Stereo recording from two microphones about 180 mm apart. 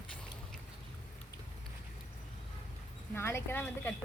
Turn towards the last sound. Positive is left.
turn(degrees=10)  # may be behind; listen again after turning